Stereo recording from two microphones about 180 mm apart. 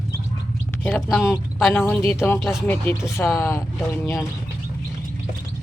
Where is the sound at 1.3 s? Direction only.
5° right (ahead or behind).